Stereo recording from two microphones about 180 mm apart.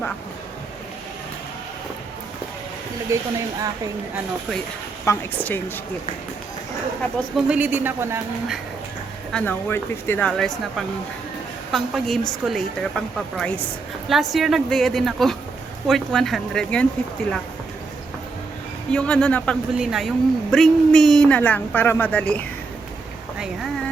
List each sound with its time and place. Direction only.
3.1 s speech: 15° right (ahead or behind)
5.0 s speech: 10° left (ahead or behind)
7.0 s speech: centre (ahead or behind)
9.3 s a woman's voice: 10° left (ahead or behind)
18.9 s speech: 5° left (ahead or behind)